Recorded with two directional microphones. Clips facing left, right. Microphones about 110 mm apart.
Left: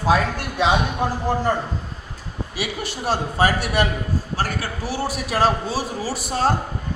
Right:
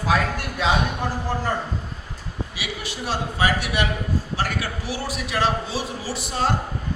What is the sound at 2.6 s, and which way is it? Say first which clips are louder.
A man's voice: left 7 dB; 45° left (ahead or behind).